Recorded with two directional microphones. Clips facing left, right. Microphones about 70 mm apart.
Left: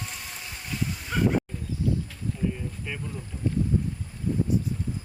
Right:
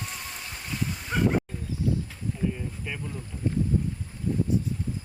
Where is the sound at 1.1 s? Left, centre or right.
Right.